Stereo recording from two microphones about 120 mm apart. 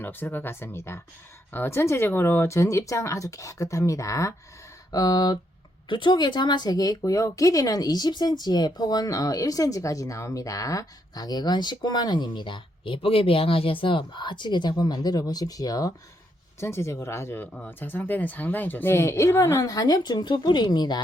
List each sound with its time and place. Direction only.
0.0 s speech: 15° left (ahead or behind); by 21.0 s 35° left (ahead or behind)